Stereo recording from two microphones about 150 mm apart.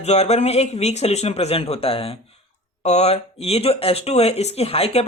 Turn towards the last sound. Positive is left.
turn(degrees=40)  # may be behind; listen again after turning